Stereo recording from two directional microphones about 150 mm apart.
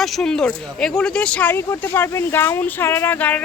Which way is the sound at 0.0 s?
Centre (ahead or behind).